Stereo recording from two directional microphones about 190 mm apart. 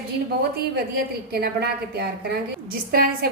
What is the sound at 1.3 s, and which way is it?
A woman's voice, 55° right (ahead or behind).